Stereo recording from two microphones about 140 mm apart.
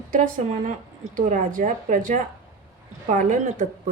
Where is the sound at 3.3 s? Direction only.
65° right (ahead or behind).